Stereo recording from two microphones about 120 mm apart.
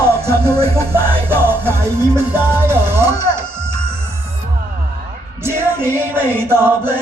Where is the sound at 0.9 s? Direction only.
20° right (ahead or behind).